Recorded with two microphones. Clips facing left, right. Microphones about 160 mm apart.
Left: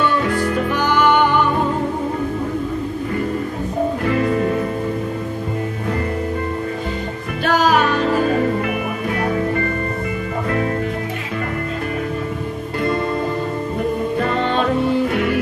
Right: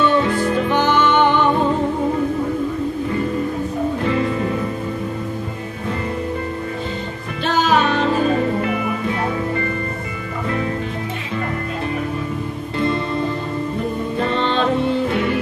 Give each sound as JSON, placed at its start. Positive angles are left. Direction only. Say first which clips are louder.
{"t": 0.0, "sound": "music", "louder": "right 2 dB", "side_deg": -25}
{"t": 7.4, "sound": "music", "louder": "left 1 dB", "side_deg": -25}
{"t": 14.2, "sound": "music", "louder": "right 2 dB", "side_deg": -25}